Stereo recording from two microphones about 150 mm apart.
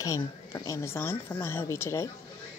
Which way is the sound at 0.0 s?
20° left (ahead or behind).